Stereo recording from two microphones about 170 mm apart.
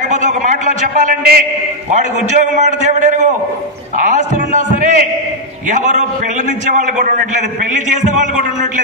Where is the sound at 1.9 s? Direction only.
45° right (ahead or behind).